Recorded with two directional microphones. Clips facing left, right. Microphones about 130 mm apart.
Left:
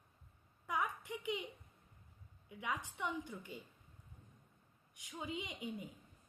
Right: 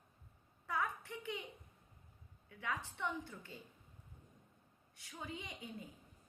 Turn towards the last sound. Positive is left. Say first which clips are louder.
# left 5 dB
turn(degrees=15)  # may be behind; listen again after turning